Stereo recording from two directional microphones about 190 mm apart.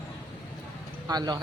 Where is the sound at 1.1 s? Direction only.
20° right (ahead or behind).